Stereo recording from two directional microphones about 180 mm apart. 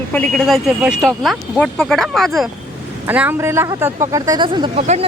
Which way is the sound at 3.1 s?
10° right (ahead or behind).